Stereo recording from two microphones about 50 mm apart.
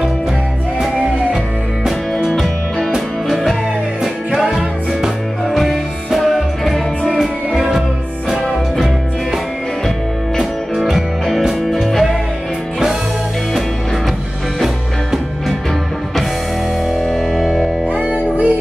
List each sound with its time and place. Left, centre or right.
2.2 s music: centre
4.0 s music: centre
7.1 s music: centre
9.8 s music: centre
14.6 s music: centre
16.9 s music: centre
17.8 s music: right